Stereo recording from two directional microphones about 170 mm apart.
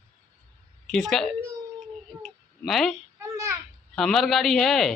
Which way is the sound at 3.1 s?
15° right (ahead or behind).